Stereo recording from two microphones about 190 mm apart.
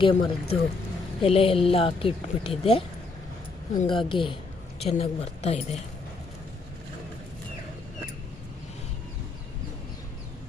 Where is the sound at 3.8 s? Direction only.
25° left (ahead or behind).